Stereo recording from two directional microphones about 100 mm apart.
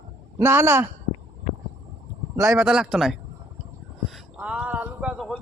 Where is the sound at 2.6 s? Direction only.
5° right (ahead or behind).